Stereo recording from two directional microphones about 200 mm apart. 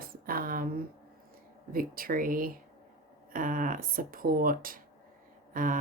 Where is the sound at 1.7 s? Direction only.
45° right (ahead or behind).